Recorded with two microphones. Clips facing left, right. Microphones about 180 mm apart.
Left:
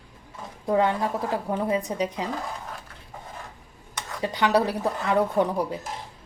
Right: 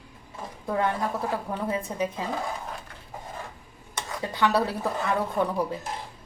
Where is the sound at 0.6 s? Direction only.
20° left (ahead or behind).